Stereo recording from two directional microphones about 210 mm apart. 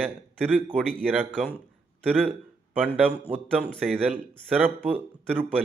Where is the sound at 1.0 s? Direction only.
10° right (ahead or behind).